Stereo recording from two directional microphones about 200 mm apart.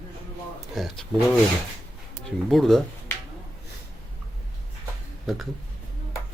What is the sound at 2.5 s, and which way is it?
Speech, centre (ahead or behind).